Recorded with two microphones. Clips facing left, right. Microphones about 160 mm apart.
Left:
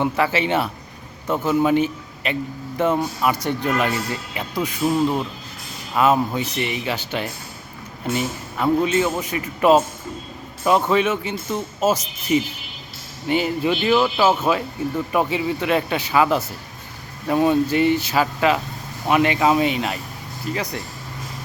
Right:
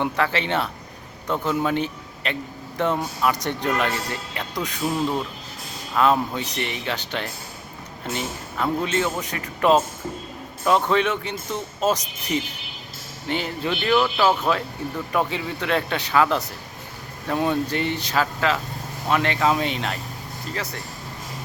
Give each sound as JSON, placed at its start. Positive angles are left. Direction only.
{"t": 0.0, "sound": "a man's voice", "side_deg": 5}